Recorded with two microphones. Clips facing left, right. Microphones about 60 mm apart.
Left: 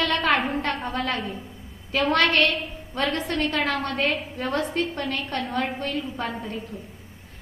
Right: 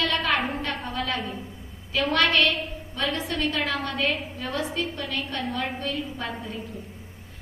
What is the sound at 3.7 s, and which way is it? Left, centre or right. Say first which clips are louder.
A woman's voice: left 2 dB; left.